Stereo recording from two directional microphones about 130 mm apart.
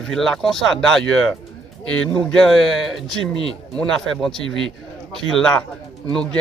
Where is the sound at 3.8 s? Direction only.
5° left (ahead or behind).